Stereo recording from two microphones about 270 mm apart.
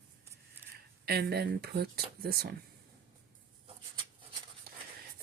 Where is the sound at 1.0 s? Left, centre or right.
Right.